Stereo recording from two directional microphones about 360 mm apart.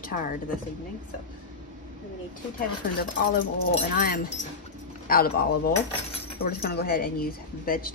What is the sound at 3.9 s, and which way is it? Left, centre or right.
Speech, left.